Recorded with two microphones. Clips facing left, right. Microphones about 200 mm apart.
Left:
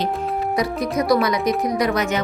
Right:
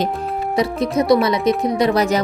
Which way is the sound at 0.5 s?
25° right (ahead or behind).